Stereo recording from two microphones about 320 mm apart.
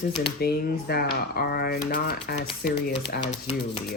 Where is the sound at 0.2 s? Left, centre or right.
Left.